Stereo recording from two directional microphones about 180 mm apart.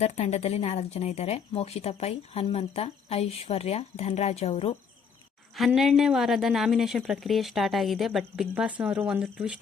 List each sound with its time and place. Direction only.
0.0 s speech: 40° left (ahead or behind)
5.5 s speech: centre (ahead or behind)